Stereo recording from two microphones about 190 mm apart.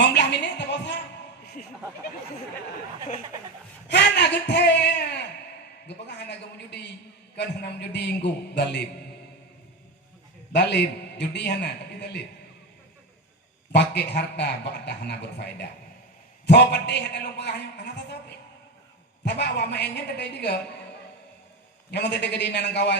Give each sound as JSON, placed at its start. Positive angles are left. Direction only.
{"t": 0.0, "sound": "a woman's voice", "side_deg": 65}
{"t": 3.8, "sound": "a sound", "side_deg": 65}
{"t": 7.3, "sound": "a man's voice", "side_deg": 65}
{"t": 10.5, "sound": "a man's voice", "side_deg": 65}
{"t": 13.7, "sound": "a man's voice", "side_deg": 60}
{"t": 16.5, "sound": "a man's voice", "side_deg": 65}
{"t": 19.2, "sound": "a man's voice", "side_deg": 65}
{"t": 21.9, "sound": "a man's voice", "side_deg": 65}